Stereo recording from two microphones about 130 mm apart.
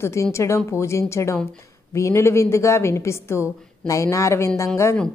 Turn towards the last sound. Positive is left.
turn(degrees=20)  # may be behind; listen again after turning